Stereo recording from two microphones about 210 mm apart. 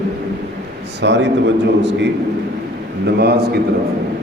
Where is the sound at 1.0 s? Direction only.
55° right (ahead or behind).